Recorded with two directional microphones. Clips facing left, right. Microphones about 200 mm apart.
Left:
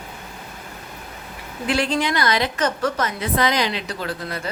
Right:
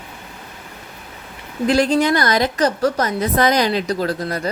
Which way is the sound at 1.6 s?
40° right (ahead or behind).